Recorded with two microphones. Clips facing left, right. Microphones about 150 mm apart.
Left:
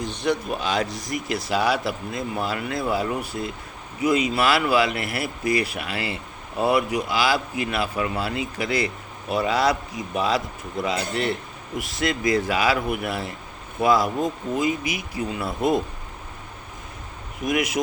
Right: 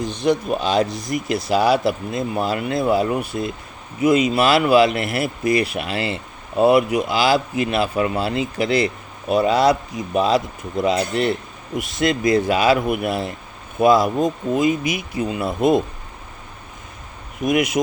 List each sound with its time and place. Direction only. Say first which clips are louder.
0.0 s speech: right 5 dB; 20° right (ahead or behind)
17.4 s speech: right 5 dB; 20° right (ahead or behind)